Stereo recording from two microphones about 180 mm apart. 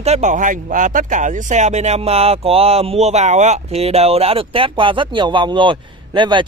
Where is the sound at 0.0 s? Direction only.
40° right (ahead or behind).